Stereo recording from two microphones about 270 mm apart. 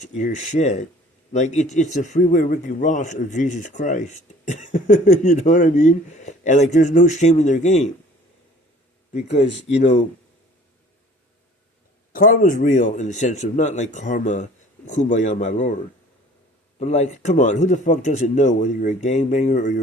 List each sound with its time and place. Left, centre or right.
0.0 s a man's voice: left
9.7 s a man's voice: left
12.1 s a man's voice: left
16.8 s a man's voice: left